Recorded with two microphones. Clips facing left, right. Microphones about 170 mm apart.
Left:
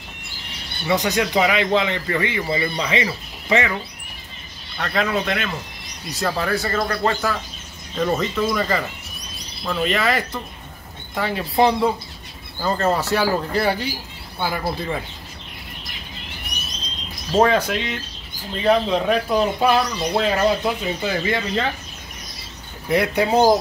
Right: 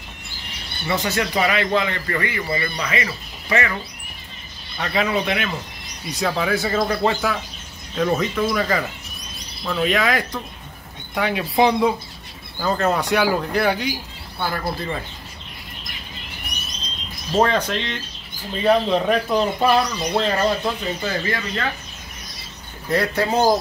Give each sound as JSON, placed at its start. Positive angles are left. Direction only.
{"t": 0.8, "sound": "speech", "side_deg": 15}
{"t": 4.7, "sound": "speech", "side_deg": -5}
{"t": 14.4, "sound": "speech", "side_deg": 5}
{"t": 17.4, "sound": "speech", "side_deg": 5}
{"t": 22.8, "sound": "speech", "side_deg": 15}